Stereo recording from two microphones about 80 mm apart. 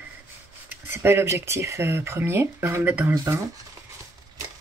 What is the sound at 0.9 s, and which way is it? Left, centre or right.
Speech, right.